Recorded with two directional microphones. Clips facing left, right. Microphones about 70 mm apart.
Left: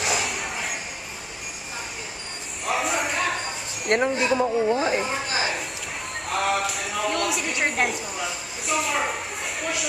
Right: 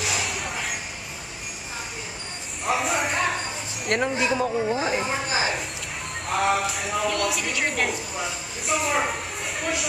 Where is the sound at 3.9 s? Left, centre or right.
Left.